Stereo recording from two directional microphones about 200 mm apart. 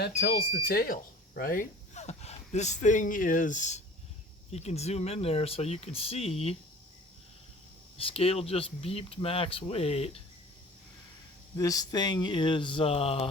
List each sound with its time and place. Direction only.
0.0 s speech: 50° left (ahead or behind); by 6.6 s 30° left (ahead or behind)
7.9 s speech: 30° left (ahead or behind)
11.5 s speech: 15° left (ahead or behind)